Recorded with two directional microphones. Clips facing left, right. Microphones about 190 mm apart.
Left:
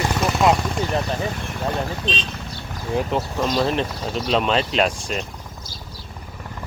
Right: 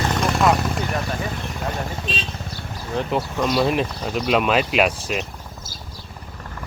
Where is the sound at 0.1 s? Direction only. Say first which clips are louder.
Even; 5° left (ahead or behind).